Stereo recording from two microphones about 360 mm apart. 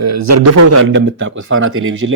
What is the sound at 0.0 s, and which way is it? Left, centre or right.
A man's voice, right.